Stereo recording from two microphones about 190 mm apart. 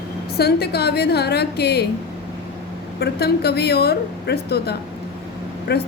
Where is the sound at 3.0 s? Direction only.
60° left (ahead or behind).